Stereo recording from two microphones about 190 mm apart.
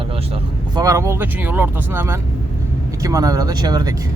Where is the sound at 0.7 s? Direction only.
20° right (ahead or behind).